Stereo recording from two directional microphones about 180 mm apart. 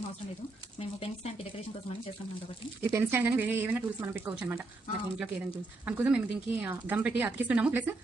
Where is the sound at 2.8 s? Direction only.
10° right (ahead or behind).